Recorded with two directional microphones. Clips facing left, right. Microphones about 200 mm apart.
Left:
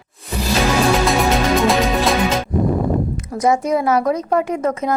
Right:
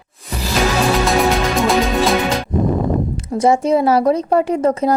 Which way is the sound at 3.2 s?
30° right (ahead or behind).